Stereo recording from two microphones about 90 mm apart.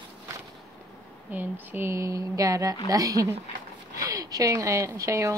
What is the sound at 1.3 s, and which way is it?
Speech, 20° right (ahead or behind).